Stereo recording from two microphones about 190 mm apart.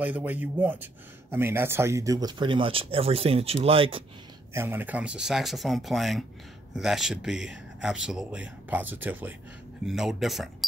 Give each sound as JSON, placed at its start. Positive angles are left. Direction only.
{"t": 0.0, "sound": "speech", "side_deg": -10}
{"t": 4.6, "sound": "speech", "side_deg": -10}